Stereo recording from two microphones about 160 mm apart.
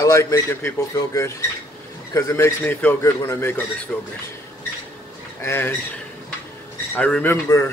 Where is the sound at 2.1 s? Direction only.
20° left (ahead or behind).